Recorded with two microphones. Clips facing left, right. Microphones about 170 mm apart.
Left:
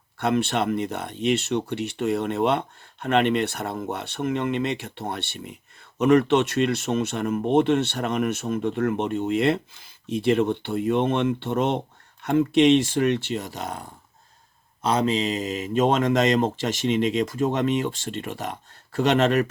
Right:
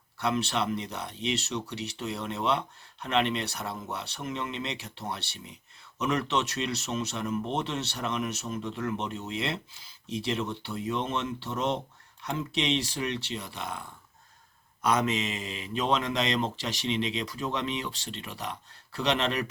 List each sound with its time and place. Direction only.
0.2 s speech: 50° left (ahead or behind)
14.8 s speech: 30° left (ahead or behind); by 19.5 s 50° left (ahead or behind)